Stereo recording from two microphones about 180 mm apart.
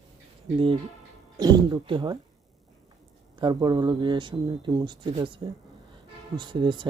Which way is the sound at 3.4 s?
25° right (ahead or behind).